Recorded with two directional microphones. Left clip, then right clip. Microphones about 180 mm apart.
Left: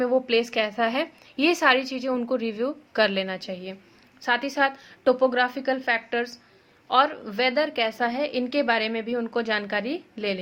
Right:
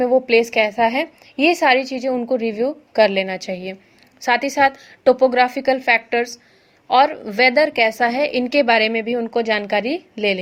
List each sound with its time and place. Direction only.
0.0 s a woman's voice: 20° right (ahead or behind)